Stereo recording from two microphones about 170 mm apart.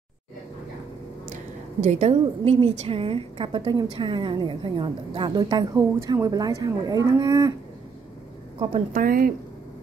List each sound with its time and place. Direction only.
1.3 s a woman's voice: 45° right (ahead or behind); by 7.5 s 25° right (ahead or behind)
8.9 s speech: 55° right (ahead or behind)